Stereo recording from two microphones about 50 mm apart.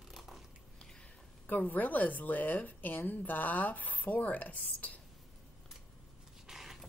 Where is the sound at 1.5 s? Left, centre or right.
Left.